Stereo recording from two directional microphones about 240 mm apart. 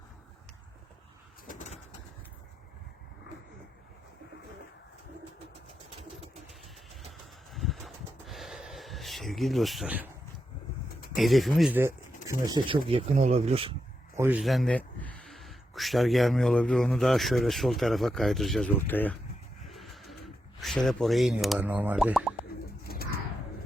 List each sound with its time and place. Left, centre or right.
1.5 s bird: left
7.5 s a sound: centre
11.2 s speech: centre
12.5 s speech: centre
14.2 s a man's voice: centre
19.6 s a sound: centre
22.8 s bird: left